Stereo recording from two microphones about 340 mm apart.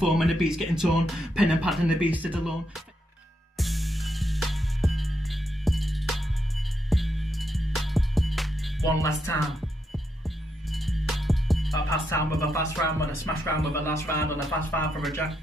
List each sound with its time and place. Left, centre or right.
0.0 s speech: centre
3.5 s music: centre
13.6 s speech: centre